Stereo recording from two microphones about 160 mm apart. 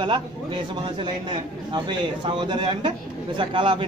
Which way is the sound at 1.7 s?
30° right (ahead or behind).